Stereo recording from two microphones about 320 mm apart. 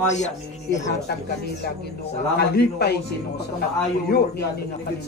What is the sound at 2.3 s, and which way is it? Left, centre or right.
Speech, left.